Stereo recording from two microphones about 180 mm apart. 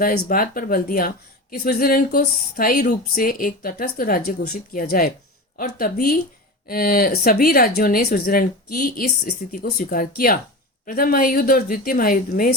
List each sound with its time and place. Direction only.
0.0 s speech: 50° left (ahead or behind)